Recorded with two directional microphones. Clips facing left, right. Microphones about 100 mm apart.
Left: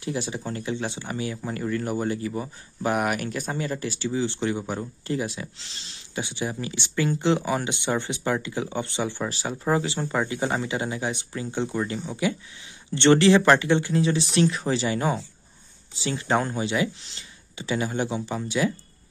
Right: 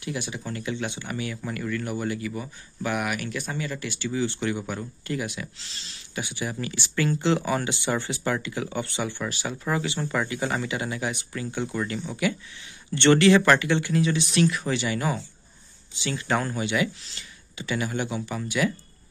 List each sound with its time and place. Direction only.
0.0 s speech: 30° left (ahead or behind)